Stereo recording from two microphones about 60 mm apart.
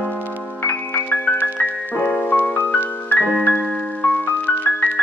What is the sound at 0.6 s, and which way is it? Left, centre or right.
Music, left.